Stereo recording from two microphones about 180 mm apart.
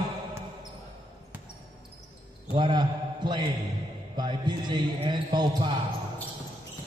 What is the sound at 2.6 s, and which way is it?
A man's voice, 25° right (ahead or behind).